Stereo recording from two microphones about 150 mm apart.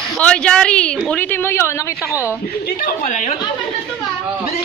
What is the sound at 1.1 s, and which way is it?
Speech, 10° left (ahead or behind).